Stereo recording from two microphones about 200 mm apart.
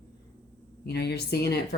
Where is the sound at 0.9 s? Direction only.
55° left (ahead or behind).